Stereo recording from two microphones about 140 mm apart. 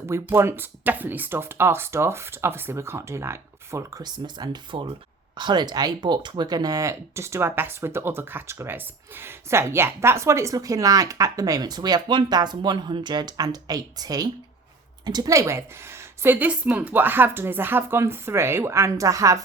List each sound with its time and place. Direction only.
0.1 s speech: 20° right (ahead or behind)